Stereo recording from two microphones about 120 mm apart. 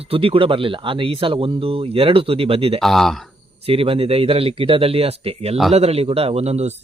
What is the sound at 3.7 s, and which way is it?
A man's voice, 50° right (ahead or behind).